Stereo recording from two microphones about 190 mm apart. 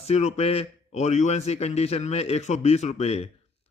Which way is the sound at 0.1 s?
35° left (ahead or behind).